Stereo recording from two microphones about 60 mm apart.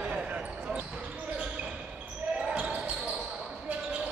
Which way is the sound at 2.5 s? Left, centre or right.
Right.